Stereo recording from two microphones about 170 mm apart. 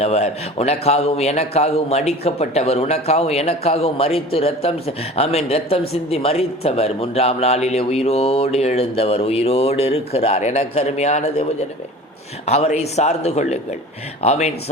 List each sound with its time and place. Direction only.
0.0 s a man's voice: 40° left (ahead or behind)
12.5 s a man's voice: 40° left (ahead or behind)